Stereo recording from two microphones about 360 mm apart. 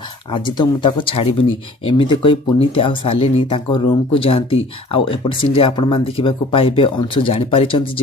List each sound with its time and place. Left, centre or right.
0.3 s speech: centre